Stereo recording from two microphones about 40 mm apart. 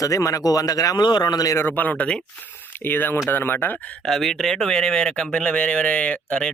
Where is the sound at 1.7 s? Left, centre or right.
Left.